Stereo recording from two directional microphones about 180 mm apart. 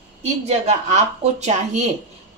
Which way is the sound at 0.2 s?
40° right (ahead or behind).